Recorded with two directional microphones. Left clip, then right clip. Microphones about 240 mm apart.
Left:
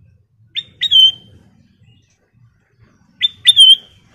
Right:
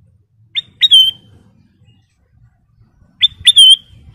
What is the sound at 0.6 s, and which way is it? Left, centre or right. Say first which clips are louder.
Bird: right 2 dB; right.